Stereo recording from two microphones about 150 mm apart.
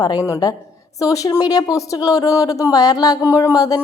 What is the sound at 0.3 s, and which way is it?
A woman's voice, 25° left (ahead or behind).